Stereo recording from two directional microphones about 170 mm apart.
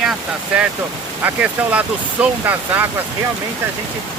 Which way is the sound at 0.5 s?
5° right (ahead or behind).